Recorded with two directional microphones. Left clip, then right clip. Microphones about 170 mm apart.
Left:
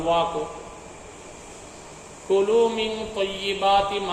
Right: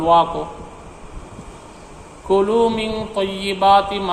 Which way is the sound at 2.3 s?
45° right (ahead or behind).